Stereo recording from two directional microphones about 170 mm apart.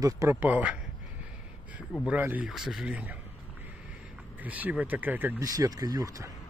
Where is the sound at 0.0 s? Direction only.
15° right (ahead or behind).